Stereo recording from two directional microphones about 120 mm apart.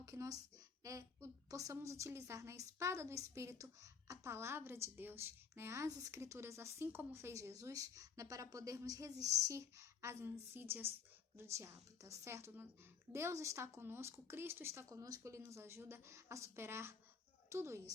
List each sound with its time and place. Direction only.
0.0 s a woman's voice: 25° right (ahead or behind)